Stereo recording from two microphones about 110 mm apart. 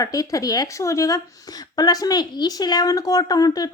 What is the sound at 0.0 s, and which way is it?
Speech, 30° left (ahead or behind).